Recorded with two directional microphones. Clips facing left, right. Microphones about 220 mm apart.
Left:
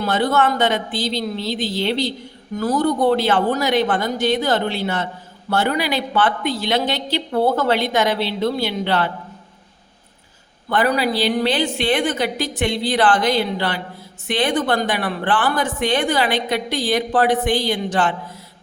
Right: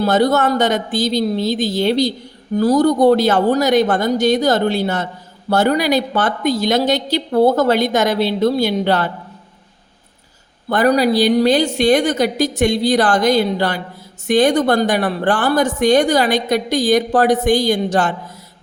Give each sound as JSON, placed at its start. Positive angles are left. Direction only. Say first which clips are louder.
{"t": 0.0, "sound": "a woman's voice", "louder": "right 4 dB", "side_deg": -40}
{"t": 10.7, "sound": "a woman's voice", "louder": "right 5 dB", "side_deg": -40}